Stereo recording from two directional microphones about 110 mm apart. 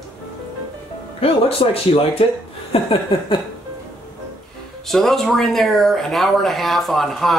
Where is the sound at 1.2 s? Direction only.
60° left (ahead or behind).